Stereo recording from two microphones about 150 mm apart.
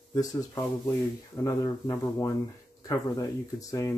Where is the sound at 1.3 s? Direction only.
25° left (ahead or behind).